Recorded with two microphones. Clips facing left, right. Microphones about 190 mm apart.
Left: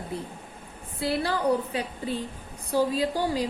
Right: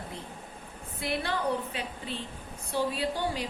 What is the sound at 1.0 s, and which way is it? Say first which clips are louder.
Speech: left 5 dB; 30° left (ahead or behind).